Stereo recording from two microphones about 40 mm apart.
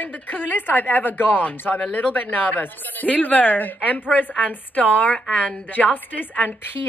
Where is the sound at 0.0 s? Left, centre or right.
Left.